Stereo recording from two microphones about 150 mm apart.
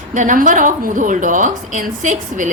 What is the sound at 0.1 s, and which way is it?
A woman's voice, 60° right (ahead or behind).